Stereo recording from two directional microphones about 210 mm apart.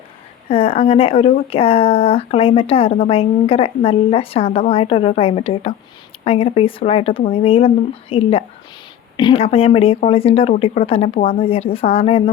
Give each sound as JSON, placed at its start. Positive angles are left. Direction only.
{"t": 0.4, "sound": "speech", "side_deg": 25}